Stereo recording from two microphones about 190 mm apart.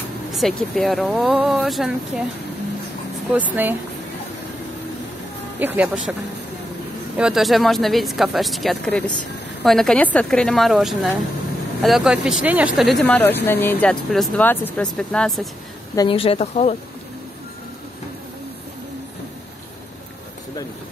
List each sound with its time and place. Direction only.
0.3 s speech: centre (ahead or behind)
3.3 s speech: 10° right (ahead or behind)
5.6 s speech: 10° right (ahead or behind)
7.2 s speech: 5° right (ahead or behind)
16.0 s speech: 30° left (ahead or behind)